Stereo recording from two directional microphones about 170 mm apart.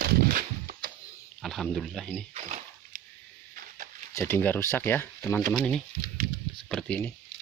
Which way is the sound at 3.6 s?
50° right (ahead or behind).